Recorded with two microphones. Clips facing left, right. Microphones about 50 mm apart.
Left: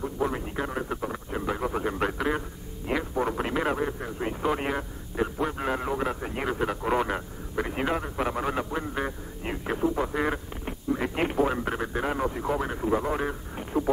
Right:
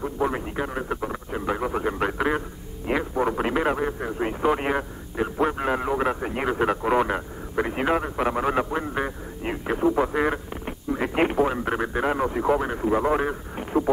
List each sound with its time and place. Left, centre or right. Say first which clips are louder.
0.0 s radio: right 3 dB; centre